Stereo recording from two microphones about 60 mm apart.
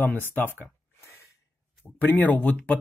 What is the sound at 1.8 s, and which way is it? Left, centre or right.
Speech, left.